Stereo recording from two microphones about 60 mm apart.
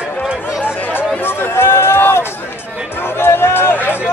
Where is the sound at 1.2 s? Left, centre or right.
Left.